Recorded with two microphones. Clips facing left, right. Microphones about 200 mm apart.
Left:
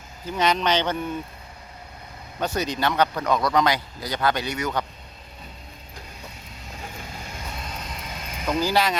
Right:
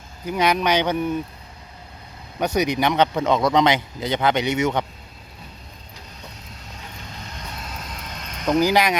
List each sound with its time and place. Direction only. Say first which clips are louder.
0.3 s speech: right 2 dB; 10° right (ahead or behind)
2.4 s speech: right 4 dB; 15° right (ahead or behind)
7.3 s vehicle: even; centre (ahead or behind)
8.5 s speech: right 4 dB; 15° right (ahead or behind)